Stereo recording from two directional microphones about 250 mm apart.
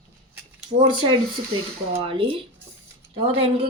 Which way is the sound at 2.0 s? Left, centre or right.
Right.